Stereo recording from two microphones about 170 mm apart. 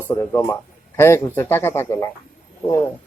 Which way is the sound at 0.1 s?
15° left (ahead or behind).